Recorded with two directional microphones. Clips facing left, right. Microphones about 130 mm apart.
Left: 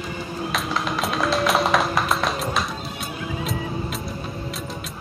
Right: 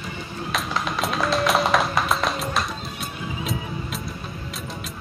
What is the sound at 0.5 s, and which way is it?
Music, centre (ahead or behind).